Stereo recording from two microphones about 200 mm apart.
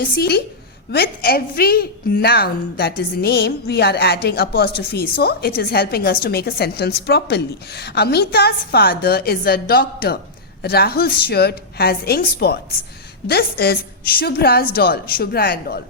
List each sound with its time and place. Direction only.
0.0 s a woman's voice: 50° left (ahead or behind)